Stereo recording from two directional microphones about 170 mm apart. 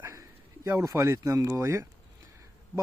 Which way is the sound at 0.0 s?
20° right (ahead or behind).